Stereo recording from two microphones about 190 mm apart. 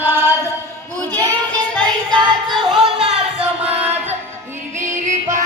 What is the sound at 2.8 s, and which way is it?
Music, 30° right (ahead or behind).